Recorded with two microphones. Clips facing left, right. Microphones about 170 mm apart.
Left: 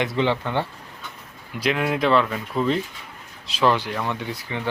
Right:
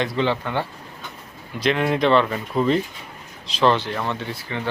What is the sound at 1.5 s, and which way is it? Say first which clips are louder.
Speech: right 2 dB; 5° left (ahead or behind).